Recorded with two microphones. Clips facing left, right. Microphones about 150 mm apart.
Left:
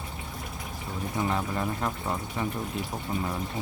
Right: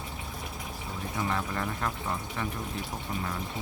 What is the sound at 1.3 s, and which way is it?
Speech, 15° left (ahead or behind).